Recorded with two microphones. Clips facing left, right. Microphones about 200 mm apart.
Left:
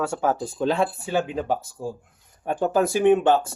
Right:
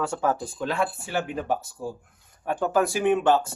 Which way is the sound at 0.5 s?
25° left (ahead or behind).